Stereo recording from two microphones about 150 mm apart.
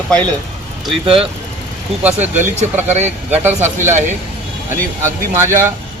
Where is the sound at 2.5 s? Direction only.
50° right (ahead or behind).